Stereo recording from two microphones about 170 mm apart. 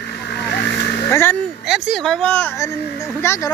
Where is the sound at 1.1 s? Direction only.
15° left (ahead or behind).